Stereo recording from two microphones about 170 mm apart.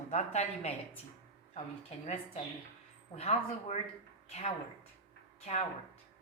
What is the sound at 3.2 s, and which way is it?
Speech, 40° left (ahead or behind).